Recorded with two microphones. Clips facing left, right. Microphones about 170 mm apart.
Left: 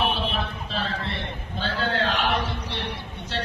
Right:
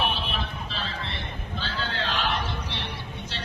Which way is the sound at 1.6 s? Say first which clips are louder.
Left 7 dB; 55° left (ahead or behind).